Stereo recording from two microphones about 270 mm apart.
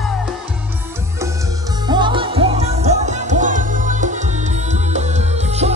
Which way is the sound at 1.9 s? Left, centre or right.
Centre.